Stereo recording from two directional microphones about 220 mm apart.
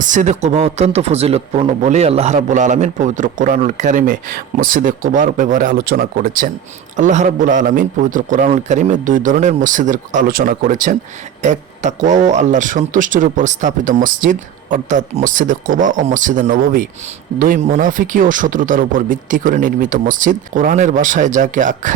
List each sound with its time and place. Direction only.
0.0 s speech: 35° right (ahead or behind)